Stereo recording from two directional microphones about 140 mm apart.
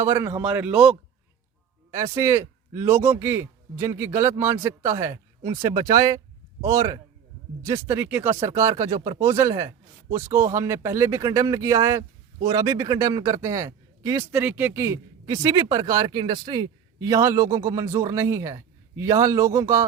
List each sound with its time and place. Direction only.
0.0 s a man's voice: 20° right (ahead or behind)
1.9 s speech: 25° right (ahead or behind)
9.0 s speech: 55° right (ahead or behind)
9.2 s speech: 20° right (ahead or behind)